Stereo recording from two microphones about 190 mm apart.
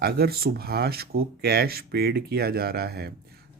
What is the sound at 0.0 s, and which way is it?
Speech, 55° right (ahead or behind).